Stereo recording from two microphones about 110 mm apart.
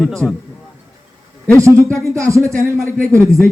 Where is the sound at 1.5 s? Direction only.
25° right (ahead or behind).